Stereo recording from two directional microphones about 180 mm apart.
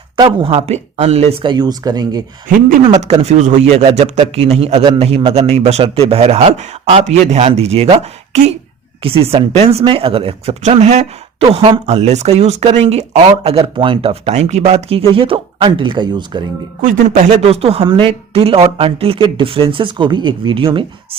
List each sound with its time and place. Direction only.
0.3 s speech: 30° right (ahead or behind)
2.9 s speech: 40° right (ahead or behind)
4.8 s speech: 25° right (ahead or behind)
5.0 s speech: 35° right (ahead or behind)
16.8 s speech: 40° right (ahead or behind)